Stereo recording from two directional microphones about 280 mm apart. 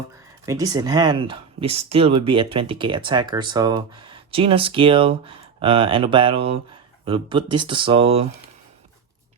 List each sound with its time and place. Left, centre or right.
0.4 s speech: centre